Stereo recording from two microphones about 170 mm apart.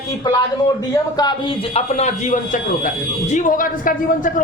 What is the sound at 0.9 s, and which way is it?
A man's voice, 25° left (ahead or behind).